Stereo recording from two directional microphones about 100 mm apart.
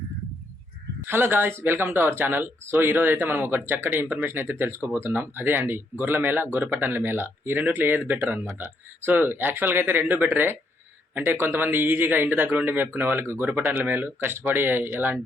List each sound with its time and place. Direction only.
1.0 s speech: 20° right (ahead or behind)